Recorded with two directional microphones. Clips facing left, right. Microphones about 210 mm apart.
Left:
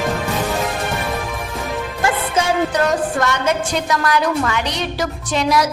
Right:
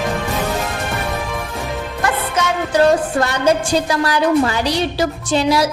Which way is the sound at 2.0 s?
30° left (ahead or behind).